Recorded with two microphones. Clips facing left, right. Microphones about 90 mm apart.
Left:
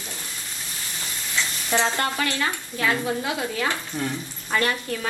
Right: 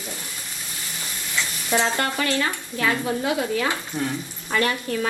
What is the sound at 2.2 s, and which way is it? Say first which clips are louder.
Speech: right 2 dB; 30° right (ahead or behind).